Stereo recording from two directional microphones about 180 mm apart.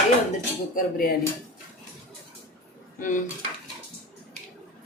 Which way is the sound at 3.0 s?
45° left (ahead or behind).